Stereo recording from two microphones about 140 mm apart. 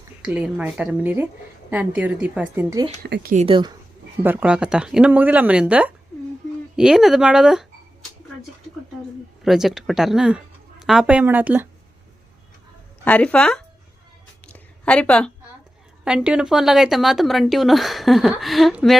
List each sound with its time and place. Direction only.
0.2 s speech: 10° right (ahead or behind)
3.0 s speech: 90° right
3.4 s a woman's voice: 35° right (ahead or behind)
4.2 s a woman's voice: 15° right (ahead or behind)
9.4 s a woman's voice: centre (ahead or behind)
13.1 s speech: 10° left (ahead or behind)
14.4 s a sound: 10° left (ahead or behind)
16.0 s a woman's voice: 5° right (ahead or behind)